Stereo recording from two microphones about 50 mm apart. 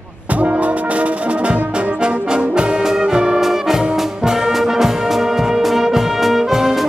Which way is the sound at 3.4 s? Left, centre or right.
Centre.